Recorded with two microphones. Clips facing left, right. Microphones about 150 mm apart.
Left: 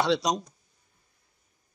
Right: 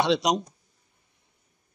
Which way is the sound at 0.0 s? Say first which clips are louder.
Right 2 dB; 20° right (ahead or behind).